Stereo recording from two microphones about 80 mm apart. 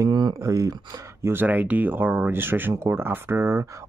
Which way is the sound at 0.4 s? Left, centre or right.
Right.